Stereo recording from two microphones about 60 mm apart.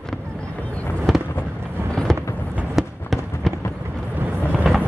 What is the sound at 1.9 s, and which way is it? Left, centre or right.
Fireworks, centre.